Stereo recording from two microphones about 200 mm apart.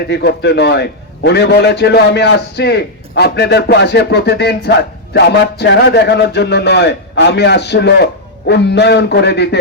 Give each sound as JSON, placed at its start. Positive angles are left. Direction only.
{"t": 0.1, "sound": "a man's voice", "side_deg": 55}